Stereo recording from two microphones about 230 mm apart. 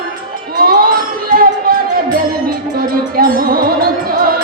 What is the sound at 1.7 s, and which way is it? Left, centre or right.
Music, right.